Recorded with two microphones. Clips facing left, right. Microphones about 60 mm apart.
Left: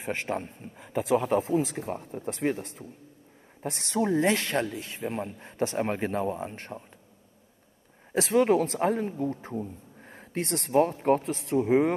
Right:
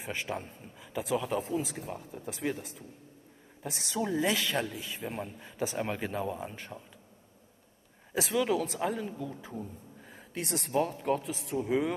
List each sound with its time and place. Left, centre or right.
0.0 s a man's voice: left
1.9 s a man's voice: left
4.0 s speech: left
8.2 s a man's voice: left
10.8 s a man's voice: left
11.2 s a man's voice: left
11.5 s a man's voice: left